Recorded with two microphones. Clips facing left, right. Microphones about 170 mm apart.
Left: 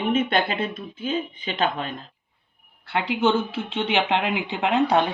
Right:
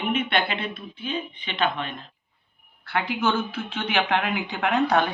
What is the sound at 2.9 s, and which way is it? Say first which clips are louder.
Speech: left 3 dB; 25° left (ahead or behind).